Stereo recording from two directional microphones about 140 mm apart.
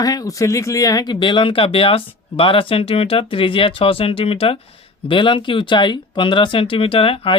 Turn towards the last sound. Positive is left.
turn(degrees=40)  # may be behind; listen again after turning